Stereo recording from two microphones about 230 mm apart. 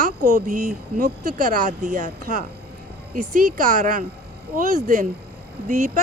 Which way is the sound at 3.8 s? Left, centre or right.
Right.